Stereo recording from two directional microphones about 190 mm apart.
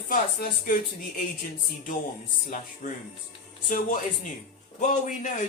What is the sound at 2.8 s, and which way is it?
Speech, 40° left (ahead or behind).